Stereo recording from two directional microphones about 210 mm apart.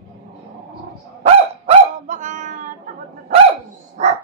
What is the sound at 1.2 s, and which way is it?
Dog, 30° right (ahead or behind).